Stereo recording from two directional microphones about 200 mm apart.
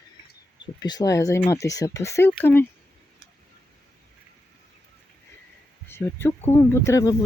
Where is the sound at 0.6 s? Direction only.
20° left (ahead or behind).